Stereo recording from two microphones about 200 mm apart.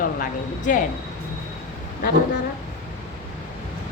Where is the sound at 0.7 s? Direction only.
40° left (ahead or behind).